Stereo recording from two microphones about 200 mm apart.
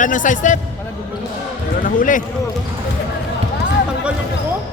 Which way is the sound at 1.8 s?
45° left (ahead or behind).